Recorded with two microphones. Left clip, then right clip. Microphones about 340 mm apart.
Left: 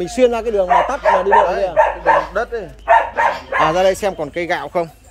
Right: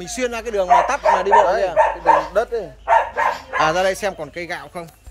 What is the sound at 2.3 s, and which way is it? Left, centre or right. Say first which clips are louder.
Speech: right 1 dB; right.